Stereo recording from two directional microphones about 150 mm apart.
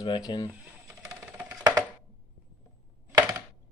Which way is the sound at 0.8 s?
10° right (ahead or behind).